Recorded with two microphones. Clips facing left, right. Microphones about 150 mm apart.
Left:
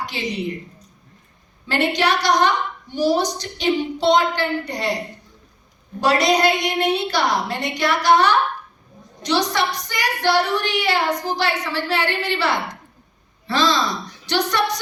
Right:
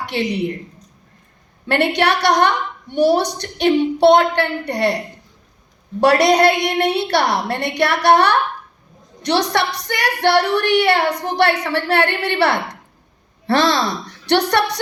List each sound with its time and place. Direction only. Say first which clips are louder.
0.0 s a woman's voice: right 6 dB; 65° right (ahead or behind)
1.6 s a woman's voice: right 3 dB; 60° right (ahead or behind)
6.0 s a woman's voice: right 4 dB; 65° right (ahead or behind)